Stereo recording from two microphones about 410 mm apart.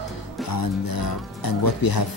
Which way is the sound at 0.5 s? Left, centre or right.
Left.